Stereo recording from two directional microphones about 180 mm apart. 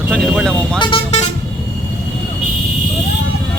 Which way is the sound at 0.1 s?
Centre (ahead or behind).